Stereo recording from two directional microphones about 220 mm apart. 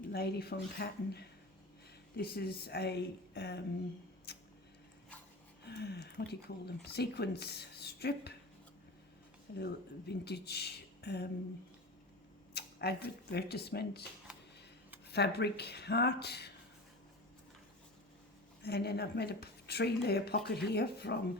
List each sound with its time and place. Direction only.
0.1 s speech: 45° left (ahead or behind)
5.6 s speech: 50° left (ahead or behind)
9.6 s speech: 50° left (ahead or behind)
12.5 s speech: 50° left (ahead or behind)
14.3 s a sound: 5° right (ahead or behind)
15.1 s speech: 50° left (ahead or behind)
18.6 s speech: 45° left (ahead or behind)